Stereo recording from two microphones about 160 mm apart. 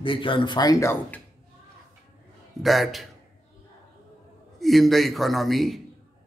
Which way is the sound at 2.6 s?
Centre (ahead or behind).